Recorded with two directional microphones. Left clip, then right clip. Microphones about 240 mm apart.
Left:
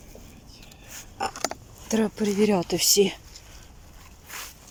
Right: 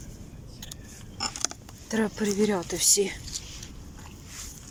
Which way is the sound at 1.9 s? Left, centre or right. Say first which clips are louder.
Left 2 dB; centre.